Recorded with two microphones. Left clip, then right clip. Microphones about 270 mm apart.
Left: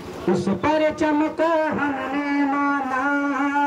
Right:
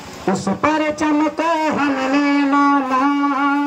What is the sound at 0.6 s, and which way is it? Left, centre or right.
Speech, centre.